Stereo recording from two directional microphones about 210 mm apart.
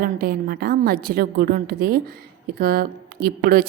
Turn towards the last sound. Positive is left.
turn(degrees=-45)  # may be behind; listen again after turning